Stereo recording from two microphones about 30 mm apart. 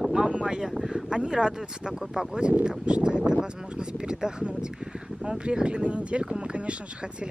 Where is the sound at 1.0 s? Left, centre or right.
Right.